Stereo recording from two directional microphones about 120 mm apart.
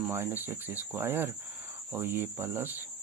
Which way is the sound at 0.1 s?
20° right (ahead or behind).